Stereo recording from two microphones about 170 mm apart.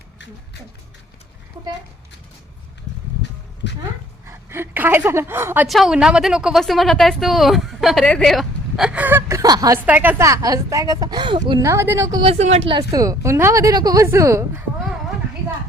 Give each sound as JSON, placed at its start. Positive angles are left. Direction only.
{"t": 4.3, "sound": "speech", "side_deg": -15}
{"t": 5.6, "sound": "a woman's voice", "side_deg": 0}
{"t": 9.8, "sound": "speech", "side_deg": -10}
{"t": 12.2, "sound": "speech", "side_deg": -40}
{"t": 12.9, "sound": "speech", "side_deg": -20}